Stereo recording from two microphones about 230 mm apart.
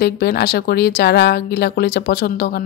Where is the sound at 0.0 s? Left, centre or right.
Left.